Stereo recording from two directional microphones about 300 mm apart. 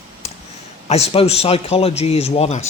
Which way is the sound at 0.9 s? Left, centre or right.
Left.